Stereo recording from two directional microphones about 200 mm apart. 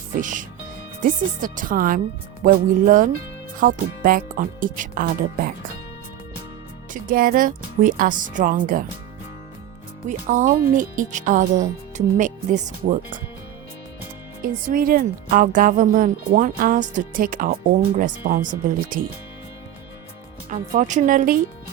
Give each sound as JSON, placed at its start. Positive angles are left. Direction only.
{"t": 0.2, "sound": "speech", "side_deg": -40}
{"t": 6.9, "sound": "speech", "side_deg": -45}
{"t": 10.1, "sound": "speech", "side_deg": -40}
{"t": 14.7, "sound": "speech", "side_deg": -45}
{"t": 20.5, "sound": "speech", "side_deg": -40}